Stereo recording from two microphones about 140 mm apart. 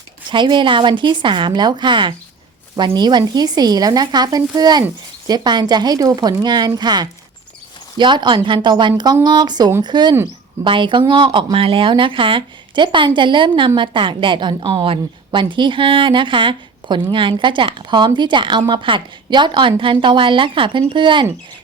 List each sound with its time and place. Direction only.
0.3 s a woman's voice: 35° right (ahead or behind)